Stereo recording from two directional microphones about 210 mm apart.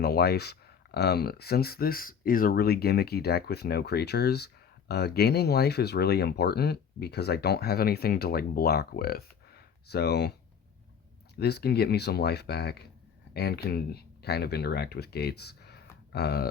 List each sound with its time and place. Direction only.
0.0 s speech: 50° left (ahead or behind)
11.3 s speech: 50° left (ahead or behind)